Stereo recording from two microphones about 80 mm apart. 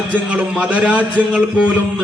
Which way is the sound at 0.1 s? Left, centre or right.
Centre.